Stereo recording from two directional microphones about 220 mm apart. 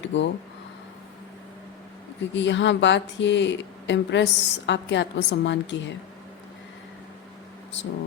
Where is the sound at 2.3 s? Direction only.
55° left (ahead or behind).